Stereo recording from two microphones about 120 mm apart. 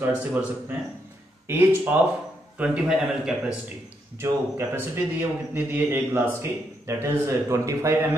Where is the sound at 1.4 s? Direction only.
15° right (ahead or behind).